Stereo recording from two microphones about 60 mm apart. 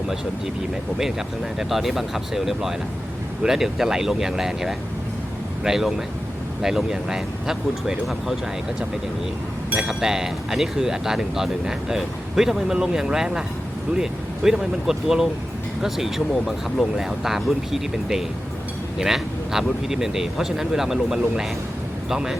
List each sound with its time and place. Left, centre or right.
1.5 s speech: centre
9.7 s speech: centre